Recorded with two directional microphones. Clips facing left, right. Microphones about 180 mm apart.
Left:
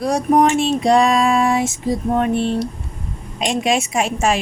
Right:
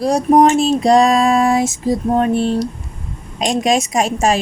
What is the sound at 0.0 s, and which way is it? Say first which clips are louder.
Speech: right 3 dB; 35° right (ahead or behind).